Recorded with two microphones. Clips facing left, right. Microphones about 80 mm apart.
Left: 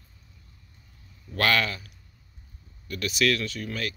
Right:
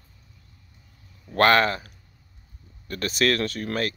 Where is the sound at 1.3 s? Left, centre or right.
Right.